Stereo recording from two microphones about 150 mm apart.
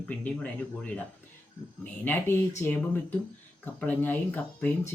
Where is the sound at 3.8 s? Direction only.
10° left (ahead or behind).